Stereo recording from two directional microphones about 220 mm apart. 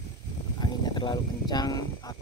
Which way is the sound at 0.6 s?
20° left (ahead or behind).